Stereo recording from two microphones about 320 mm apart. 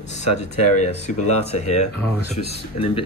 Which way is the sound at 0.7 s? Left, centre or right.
Left.